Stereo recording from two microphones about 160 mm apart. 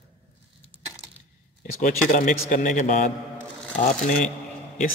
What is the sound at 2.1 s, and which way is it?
Speech, 55° left (ahead or behind).